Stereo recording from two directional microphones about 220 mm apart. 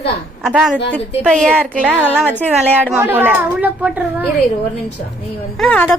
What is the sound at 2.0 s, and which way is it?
Speech, 5° left (ahead or behind).